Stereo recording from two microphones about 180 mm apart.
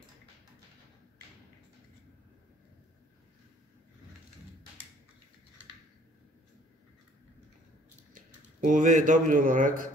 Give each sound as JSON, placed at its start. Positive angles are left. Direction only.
{"t": 8.1, "sound": "a man's voice", "side_deg": -45}